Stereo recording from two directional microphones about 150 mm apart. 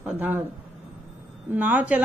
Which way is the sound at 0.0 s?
10° right (ahead or behind).